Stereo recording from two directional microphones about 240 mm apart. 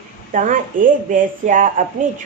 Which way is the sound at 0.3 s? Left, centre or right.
Right.